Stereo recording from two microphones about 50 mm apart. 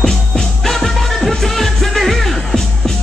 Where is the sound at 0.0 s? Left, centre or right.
Centre.